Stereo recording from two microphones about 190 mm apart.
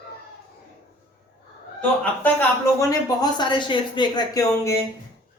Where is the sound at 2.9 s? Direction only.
20° left (ahead or behind).